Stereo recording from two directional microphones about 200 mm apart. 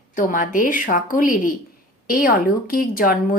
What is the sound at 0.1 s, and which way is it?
Speech, 40° left (ahead or behind).